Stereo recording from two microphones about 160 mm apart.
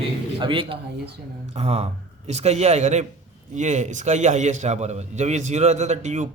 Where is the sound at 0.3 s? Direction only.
30° right (ahead or behind).